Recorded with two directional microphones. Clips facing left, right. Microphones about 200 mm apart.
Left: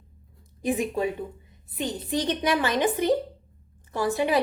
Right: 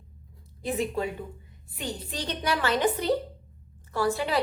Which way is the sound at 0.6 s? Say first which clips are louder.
Left 3 dB; 15° left (ahead or behind).